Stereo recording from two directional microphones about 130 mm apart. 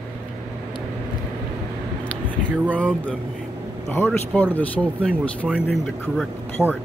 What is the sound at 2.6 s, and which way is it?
Speech, 10° left (ahead or behind).